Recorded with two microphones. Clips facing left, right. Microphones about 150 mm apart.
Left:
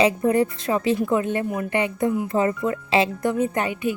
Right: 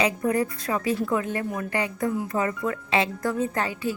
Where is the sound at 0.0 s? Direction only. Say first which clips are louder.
Left 5 dB; 25° left (ahead or behind).